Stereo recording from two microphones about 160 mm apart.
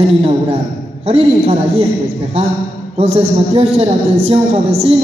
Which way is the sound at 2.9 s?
40° right (ahead or behind).